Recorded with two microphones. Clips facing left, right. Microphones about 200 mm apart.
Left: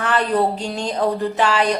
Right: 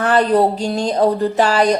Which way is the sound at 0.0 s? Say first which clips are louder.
Right 5 dB; 40° right (ahead or behind).